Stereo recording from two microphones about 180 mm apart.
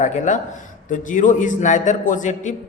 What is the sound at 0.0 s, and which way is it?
A man's voice, 40° left (ahead or behind).